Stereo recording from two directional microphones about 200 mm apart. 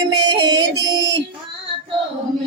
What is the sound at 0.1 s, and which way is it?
Music, 20° right (ahead or behind).